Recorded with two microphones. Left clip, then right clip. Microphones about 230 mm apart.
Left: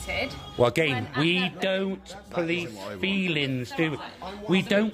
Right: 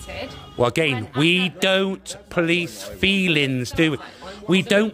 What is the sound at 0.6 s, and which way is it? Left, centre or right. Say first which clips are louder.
Speech: right 3 dB; right.